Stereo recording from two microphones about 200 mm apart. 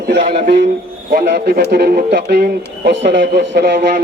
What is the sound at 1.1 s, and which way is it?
Speech, 55° right (ahead or behind).